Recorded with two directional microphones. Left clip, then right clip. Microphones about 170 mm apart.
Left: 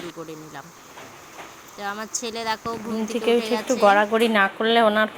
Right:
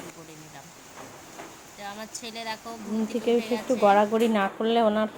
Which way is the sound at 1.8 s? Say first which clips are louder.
Left 8 dB; 25° left (ahead or behind).